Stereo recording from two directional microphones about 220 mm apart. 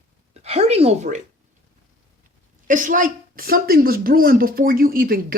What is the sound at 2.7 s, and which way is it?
Speech, 35° right (ahead or behind).